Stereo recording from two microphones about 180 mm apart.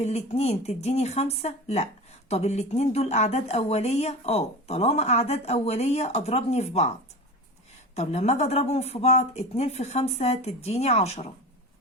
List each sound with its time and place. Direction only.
0.0 s speech: 35° left (ahead or behind)
7.9 s speech: 35° left (ahead or behind)